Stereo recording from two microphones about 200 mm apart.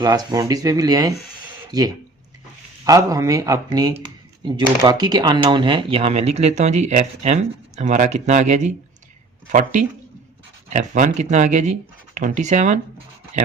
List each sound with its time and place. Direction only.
0.0 s speech: 20° right (ahead or behind); by 12.8 s 35° right (ahead or behind)